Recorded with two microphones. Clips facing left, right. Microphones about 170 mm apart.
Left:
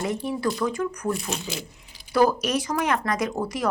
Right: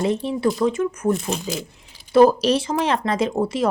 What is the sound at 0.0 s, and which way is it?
Speech, 25° right (ahead or behind).